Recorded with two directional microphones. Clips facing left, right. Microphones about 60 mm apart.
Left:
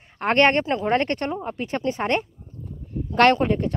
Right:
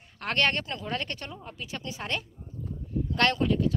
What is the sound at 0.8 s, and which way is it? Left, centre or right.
Speech, left.